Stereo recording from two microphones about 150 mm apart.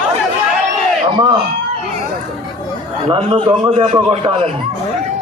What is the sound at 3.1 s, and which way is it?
Speech, 35° right (ahead or behind).